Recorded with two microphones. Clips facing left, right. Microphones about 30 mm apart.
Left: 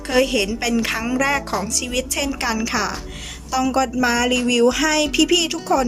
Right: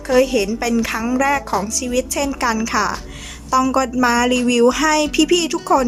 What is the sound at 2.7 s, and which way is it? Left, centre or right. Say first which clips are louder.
A woman's voice: right 4 dB; centre.